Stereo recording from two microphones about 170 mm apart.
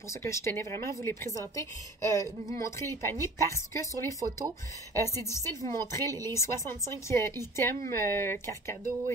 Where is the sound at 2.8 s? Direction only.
15° left (ahead or behind).